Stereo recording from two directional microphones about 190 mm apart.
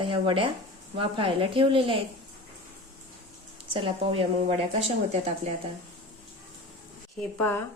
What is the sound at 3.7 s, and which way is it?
A woman's voice, 30° right (ahead or behind).